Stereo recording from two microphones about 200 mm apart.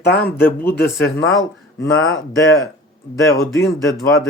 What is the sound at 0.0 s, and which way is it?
Speech, 55° left (ahead or behind).